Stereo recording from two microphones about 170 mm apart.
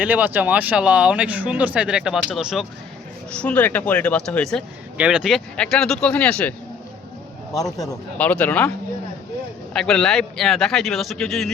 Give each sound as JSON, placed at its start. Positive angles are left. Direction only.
{"t": 0.0, "sound": "speech", "side_deg": -10}
{"t": 3.3, "sound": "speech", "side_deg": 10}
{"t": 4.9, "sound": "a man's voice", "side_deg": -5}
{"t": 7.5, "sound": "speech", "side_deg": 20}
{"t": 8.2, "sound": "speech", "side_deg": 10}
{"t": 9.7, "sound": "a man's voice", "side_deg": 5}